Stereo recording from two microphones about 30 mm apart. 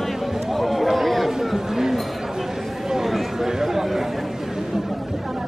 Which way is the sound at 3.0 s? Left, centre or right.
Centre.